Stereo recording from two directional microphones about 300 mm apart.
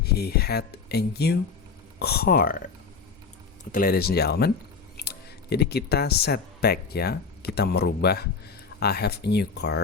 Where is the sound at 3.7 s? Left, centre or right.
Left.